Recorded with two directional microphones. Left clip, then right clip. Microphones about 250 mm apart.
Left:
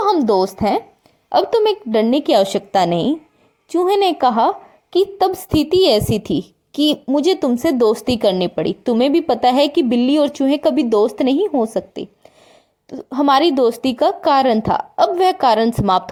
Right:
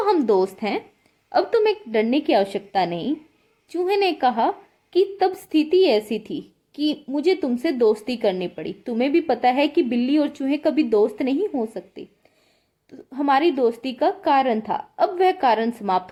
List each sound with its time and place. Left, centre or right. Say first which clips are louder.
0.0 s a woman's voice: left 4 dB; centre